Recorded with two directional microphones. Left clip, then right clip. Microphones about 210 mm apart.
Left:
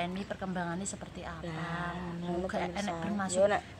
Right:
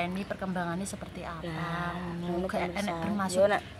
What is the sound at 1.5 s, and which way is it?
Speech, 5° left (ahead or behind).